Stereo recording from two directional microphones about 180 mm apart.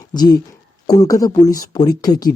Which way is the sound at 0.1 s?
20° left (ahead or behind).